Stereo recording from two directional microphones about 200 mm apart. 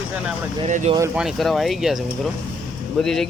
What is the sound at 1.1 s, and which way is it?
Speech, centre (ahead or behind).